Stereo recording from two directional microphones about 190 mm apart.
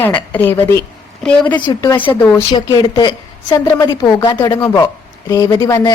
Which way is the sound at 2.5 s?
25° left (ahead or behind).